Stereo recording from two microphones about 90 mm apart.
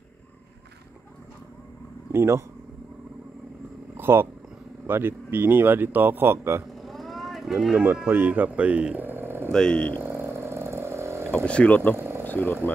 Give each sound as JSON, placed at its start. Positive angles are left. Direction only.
{"t": 2.1, "sound": "speech", "side_deg": -30}
{"t": 3.9, "sound": "vehicle", "side_deg": -25}
{"t": 4.8, "sound": "speech", "side_deg": -25}
{"t": 6.7, "sound": "vehicle", "side_deg": 0}
{"t": 7.8, "sound": "speech", "side_deg": -20}
{"t": 9.5, "sound": "speech", "side_deg": 10}
{"t": 10.0, "sound": "frog", "side_deg": -25}
{"t": 11.3, "sound": "speech", "side_deg": 10}
{"t": 12.2, "sound": "a sound", "side_deg": 20}